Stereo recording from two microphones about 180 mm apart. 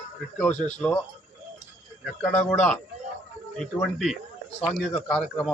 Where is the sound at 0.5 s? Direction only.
40° left (ahead or behind).